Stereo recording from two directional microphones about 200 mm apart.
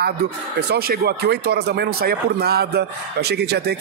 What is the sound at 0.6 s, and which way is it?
Speech, 50° right (ahead or behind).